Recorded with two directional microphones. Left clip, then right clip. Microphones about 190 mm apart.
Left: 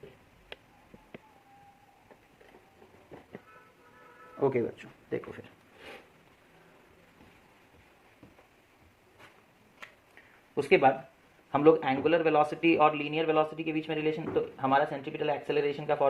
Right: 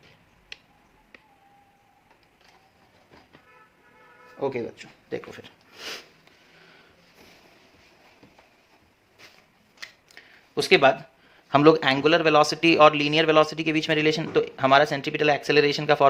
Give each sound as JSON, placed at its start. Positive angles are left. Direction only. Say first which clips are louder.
{"t": 4.4, "sound": "speech", "louder": "even", "side_deg": 0}
{"t": 5.0, "sound": "speech", "louder": "right 2 dB", "side_deg": -15}
{"t": 10.5, "sound": "speech", "louder": "right 5 dB", "side_deg": -35}
{"t": 11.5, "sound": "a man's voice", "louder": "right 6 dB", "side_deg": -50}